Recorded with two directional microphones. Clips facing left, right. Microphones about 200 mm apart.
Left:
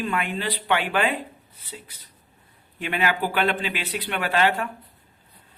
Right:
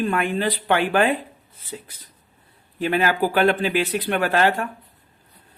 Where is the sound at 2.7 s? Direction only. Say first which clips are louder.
Right 5 dB; 40° right (ahead or behind).